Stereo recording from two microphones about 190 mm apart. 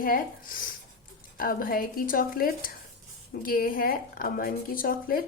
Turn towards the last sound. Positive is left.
turn(degrees=50)  # may be behind; listen again after turning